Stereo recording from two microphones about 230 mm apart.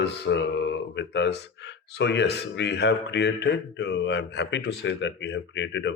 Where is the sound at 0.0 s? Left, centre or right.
Left.